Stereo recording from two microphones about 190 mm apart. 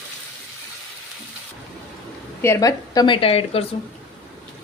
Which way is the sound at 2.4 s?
15° left (ahead or behind).